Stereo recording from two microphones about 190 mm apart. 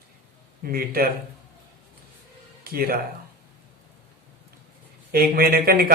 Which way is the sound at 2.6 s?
50° right (ahead or behind).